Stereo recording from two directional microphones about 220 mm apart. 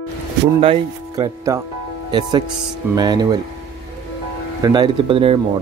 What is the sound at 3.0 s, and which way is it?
Speech, 20° right (ahead or behind).